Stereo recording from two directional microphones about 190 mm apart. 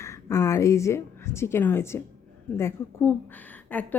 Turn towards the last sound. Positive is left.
turn(degrees=10)  # may be behind; listen again after turning